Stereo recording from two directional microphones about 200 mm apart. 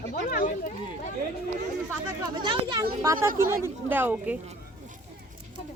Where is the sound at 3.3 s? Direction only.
45° right (ahead or behind).